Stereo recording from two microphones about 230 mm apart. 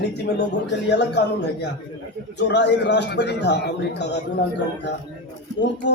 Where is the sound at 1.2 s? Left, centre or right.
Left.